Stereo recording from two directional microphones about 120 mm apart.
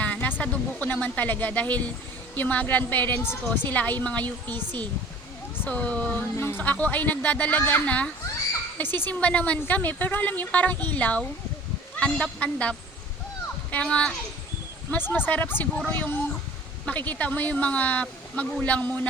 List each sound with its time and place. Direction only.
0.0 s a woman's voice: 15° left (ahead or behind)
5.5 s a woman's voice: 10° left (ahead or behind)